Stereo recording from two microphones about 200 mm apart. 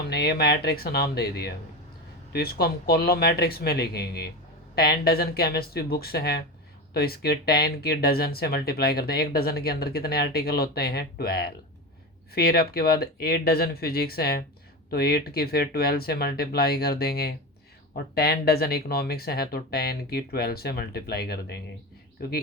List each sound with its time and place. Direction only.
0.1 s speech: 50° left (ahead or behind)